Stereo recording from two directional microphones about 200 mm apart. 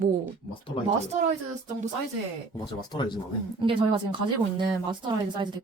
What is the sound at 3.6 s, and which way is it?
Speech, 25° right (ahead or behind).